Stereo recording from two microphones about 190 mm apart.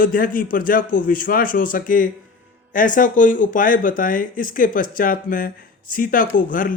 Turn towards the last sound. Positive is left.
turn(degrees=45)  # may be behind; listen again after turning